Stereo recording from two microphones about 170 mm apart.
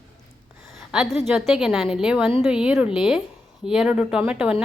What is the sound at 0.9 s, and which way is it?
A woman's voice, centre (ahead or behind).